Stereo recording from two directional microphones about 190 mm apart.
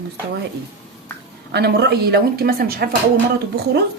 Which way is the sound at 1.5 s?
60° right (ahead or behind).